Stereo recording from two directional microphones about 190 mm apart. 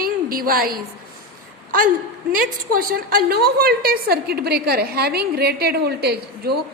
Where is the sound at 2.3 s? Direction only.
50° right (ahead or behind).